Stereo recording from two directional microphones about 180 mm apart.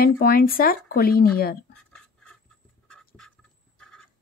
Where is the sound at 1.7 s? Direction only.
5° left (ahead or behind).